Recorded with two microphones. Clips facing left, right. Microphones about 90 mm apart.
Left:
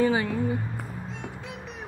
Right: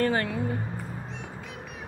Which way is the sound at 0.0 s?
5° left (ahead or behind).